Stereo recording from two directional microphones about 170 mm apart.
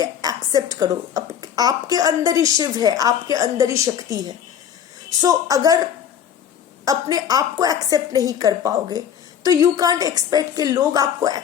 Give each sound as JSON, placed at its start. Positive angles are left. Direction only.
{"t": 0.0, "sound": "a woman's voice", "side_deg": -20}